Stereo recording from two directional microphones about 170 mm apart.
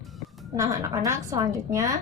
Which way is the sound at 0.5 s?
20° right (ahead or behind).